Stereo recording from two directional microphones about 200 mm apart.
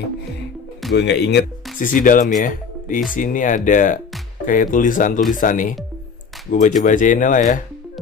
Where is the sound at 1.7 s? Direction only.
40° left (ahead or behind).